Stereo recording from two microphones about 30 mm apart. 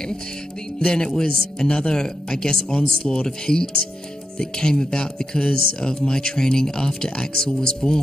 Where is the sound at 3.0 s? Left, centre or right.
Left.